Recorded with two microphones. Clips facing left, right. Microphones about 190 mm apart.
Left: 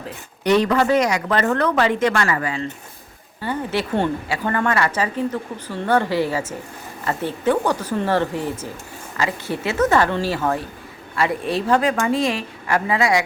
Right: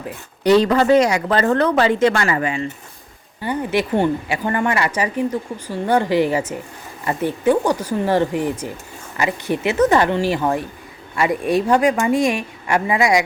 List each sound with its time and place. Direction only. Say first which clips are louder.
0.4 s a woman's voice: right 3 dB; 30° right (ahead or behind); by 13.2 s 15° right (ahead or behind)